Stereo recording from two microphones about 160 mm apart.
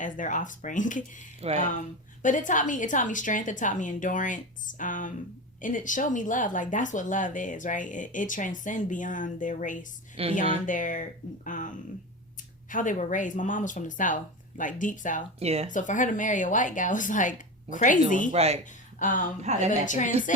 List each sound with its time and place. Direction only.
0.0 s speech: 55° left (ahead or behind)
1.4 s speech: 40° right (ahead or behind)
2.2 s speech: 55° left (ahead or behind)
10.2 s speech: 40° right (ahead or behind)
10.7 s speech: 55° left (ahead or behind)
12.7 s speech: 55° left (ahead or behind)
15.4 s speech: 40° right (ahead or behind)
15.7 s speech: 55° left (ahead or behind)
18.3 s speech: 40° right (ahead or behind)
18.9 s speech: 55° left (ahead or behind)
19.4 s speech: 45° right (ahead or behind)
19.8 s speech: 50° left (ahead or behind)